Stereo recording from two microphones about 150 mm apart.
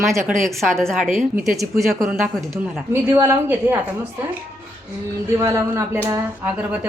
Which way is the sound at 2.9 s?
15° right (ahead or behind).